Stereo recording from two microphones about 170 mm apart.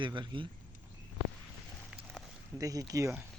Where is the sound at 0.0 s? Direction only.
30° right (ahead or behind).